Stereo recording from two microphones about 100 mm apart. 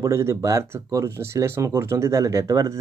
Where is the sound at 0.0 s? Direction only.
30° right (ahead or behind).